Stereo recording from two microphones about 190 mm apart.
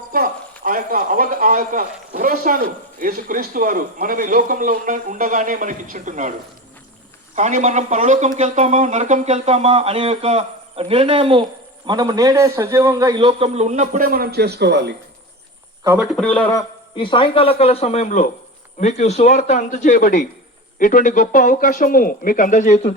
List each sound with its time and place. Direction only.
0.1 s speech: 50° right (ahead or behind)
7.3 s a man's voice: 40° right (ahead or behind); by 14.9 s 60° right (ahead or behind)
16.0 s a man's voice: 5° left (ahead or behind)
16.5 s a man's voice: 20° left (ahead or behind); by 22.8 s 40° left (ahead or behind)